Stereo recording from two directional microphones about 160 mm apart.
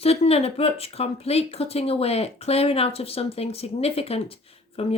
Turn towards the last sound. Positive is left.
turn(degrees=40)  # may be behind; listen again after turning